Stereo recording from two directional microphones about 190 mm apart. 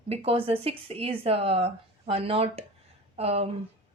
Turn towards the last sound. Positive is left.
turn(degrees=-30)  # may be behind; listen again after turning